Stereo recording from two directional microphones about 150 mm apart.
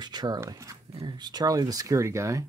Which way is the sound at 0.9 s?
30° right (ahead or behind).